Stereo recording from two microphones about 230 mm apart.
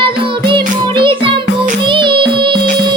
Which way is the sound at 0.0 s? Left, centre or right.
Right.